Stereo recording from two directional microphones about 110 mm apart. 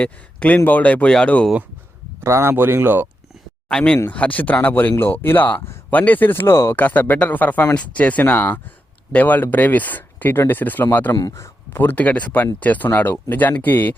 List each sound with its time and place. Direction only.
0.0 s speech: 15° left (ahead or behind)
2.2 s speech: 20° right (ahead or behind)
3.7 s speech: 10° left (ahead or behind)
11.1 s speech: 30° left (ahead or behind)